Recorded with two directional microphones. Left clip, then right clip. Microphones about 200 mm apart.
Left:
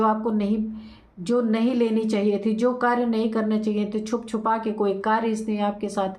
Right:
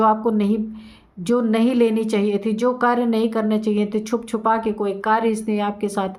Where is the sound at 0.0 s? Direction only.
30° right (ahead or behind).